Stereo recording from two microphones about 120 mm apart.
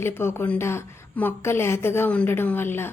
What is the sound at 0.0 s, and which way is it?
A woman's voice, 20° left (ahead or behind).